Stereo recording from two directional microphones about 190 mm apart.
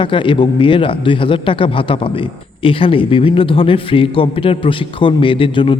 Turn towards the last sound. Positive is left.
turn(degrees=25)  # may be behind; listen again after turning